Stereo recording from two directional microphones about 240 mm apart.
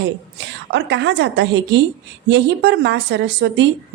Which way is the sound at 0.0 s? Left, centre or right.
Right.